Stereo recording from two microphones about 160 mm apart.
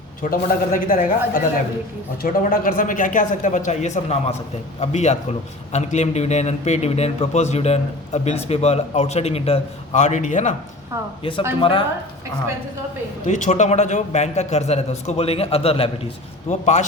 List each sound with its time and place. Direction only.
0.2 s a man's voice: 60° left (ahead or behind)
11.2 s speech: 35° left (ahead or behind)
13.2 s a man's voice: 50° left (ahead or behind)